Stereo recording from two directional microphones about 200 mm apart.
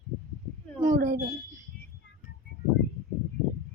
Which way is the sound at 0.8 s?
45° right (ahead or behind).